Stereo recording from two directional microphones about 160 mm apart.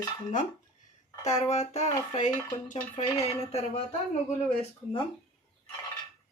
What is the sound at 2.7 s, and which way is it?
Speech, 45° left (ahead or behind).